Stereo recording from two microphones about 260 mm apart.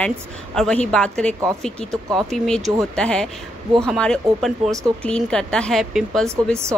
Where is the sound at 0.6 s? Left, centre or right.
Centre.